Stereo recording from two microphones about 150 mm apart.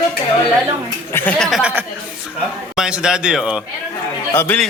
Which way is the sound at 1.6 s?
10° right (ahead or behind).